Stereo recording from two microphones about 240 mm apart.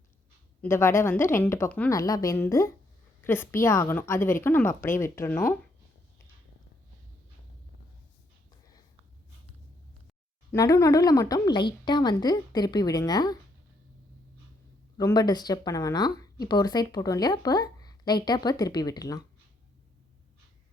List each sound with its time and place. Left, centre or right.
0.6 s speech: centre
10.5 s speech: centre
14.9 s speech: centre